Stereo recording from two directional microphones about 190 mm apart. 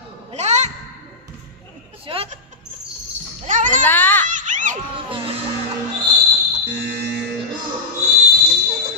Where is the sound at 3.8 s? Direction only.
10° left (ahead or behind).